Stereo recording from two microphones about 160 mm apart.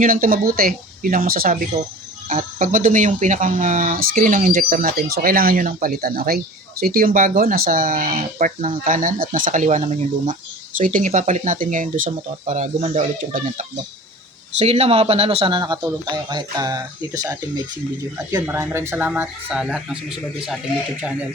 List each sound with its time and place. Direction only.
0.0 s speech: 60° right (ahead or behind)
14.6 s speech: 40° right (ahead or behind); by 17.3 s 20° right (ahead or behind)
18.4 s speech: 15° right (ahead or behind)